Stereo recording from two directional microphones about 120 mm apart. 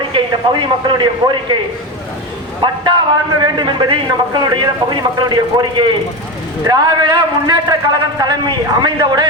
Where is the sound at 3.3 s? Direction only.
40° right (ahead or behind).